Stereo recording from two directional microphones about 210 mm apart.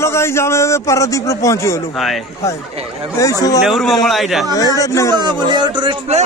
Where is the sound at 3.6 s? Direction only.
Centre (ahead or behind).